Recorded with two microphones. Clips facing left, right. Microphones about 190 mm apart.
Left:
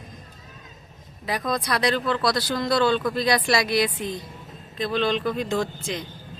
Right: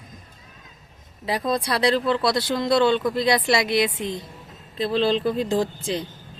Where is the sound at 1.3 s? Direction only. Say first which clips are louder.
Right 2 dB; 30° right (ahead or behind).